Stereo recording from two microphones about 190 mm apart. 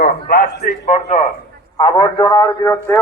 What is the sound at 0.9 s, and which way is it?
A man's voice, 35° left (ahead or behind).